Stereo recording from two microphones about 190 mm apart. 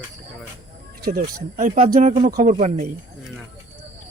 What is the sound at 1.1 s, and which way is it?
Speech, 50° right (ahead or behind).